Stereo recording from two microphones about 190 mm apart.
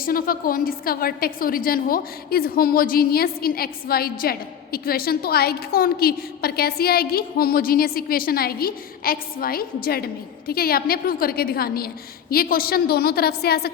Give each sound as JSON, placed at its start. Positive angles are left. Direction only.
{"t": 0.0, "sound": "a woman's voice", "side_deg": 50}